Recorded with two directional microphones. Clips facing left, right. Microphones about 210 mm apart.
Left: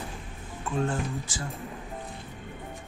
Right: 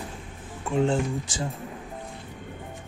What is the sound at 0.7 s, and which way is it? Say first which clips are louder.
Speech: right 6 dB; 15° right (ahead or behind).